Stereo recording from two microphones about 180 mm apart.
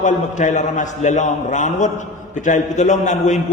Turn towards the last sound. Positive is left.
turn(degrees=40)  # may be behind; listen again after turning